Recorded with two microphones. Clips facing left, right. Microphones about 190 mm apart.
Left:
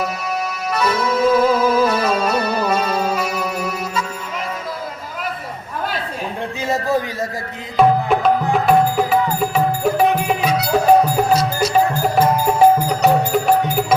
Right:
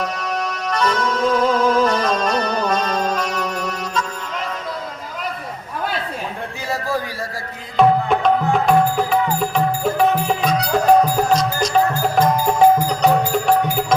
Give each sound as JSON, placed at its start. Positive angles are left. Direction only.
{"t": 0.7, "sound": "music", "side_deg": 10}
{"t": 6.7, "sound": "a sound", "side_deg": 20}
{"t": 7.8, "sound": "music", "side_deg": 5}